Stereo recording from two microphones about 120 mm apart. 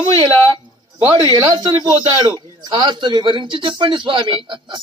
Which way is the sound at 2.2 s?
40° right (ahead or behind).